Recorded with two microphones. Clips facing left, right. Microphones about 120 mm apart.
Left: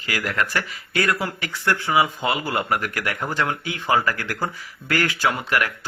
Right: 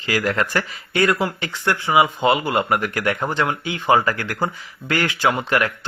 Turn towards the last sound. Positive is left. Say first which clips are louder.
# right 3 dB
turn(degrees=-25)  # may be behind; listen again after turning